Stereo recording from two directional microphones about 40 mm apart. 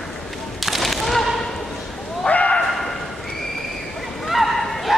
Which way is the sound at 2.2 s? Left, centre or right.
Left.